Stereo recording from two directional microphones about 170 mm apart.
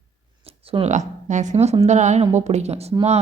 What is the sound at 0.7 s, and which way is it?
A woman's voice, 40° right (ahead or behind).